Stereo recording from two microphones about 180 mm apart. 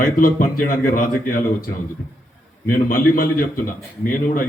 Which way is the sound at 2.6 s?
50° left (ahead or behind).